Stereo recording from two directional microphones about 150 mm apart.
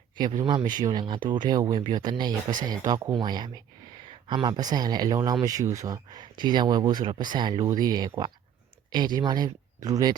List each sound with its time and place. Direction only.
0.2 s speech: 30° right (ahead or behind)